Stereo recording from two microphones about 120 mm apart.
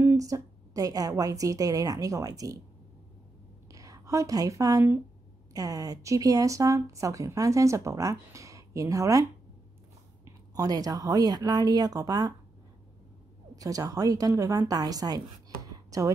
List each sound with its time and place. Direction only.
0.0 s speech: 25° right (ahead or behind)
3.7 s speech: 30° right (ahead or behind)
10.2 s speech: 30° right (ahead or behind)
13.6 s speech: 30° right (ahead or behind)